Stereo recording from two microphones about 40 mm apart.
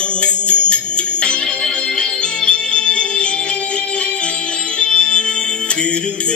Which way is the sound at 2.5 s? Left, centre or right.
Left.